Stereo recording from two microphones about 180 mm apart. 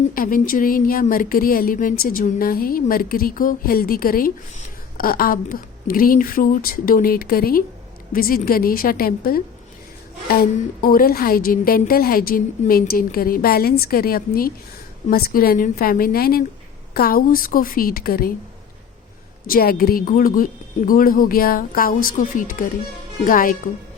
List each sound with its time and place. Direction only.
0.1 s a woman's voice: 50° left (ahead or behind)
19.5 s speech: 55° left (ahead or behind)